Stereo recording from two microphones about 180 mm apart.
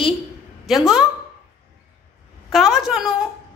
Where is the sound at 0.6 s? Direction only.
Centre (ahead or behind).